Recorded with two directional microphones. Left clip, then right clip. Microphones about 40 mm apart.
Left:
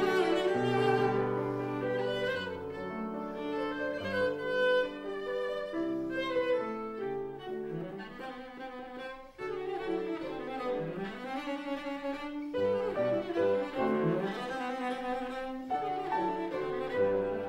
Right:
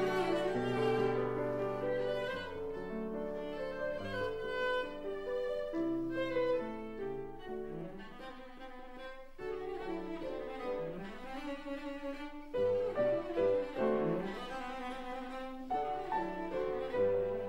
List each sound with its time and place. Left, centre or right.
0.0 s music: left
0.3 s music: centre
1.1 s music: centre
1.7 s music: centre
3.6 s violin: left
6.0 s music: centre
11.7 s music: left
13.9 s cello: centre
14.8 s music: centre
16.5 s music: centre